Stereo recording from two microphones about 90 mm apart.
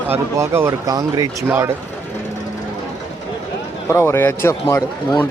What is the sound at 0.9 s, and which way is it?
Speech, 45° right (ahead or behind).